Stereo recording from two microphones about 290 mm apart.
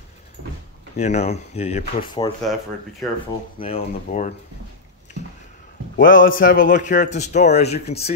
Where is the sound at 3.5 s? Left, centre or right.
Centre.